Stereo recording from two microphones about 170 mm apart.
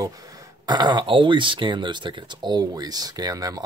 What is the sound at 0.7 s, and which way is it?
Speech, 25° right (ahead or behind).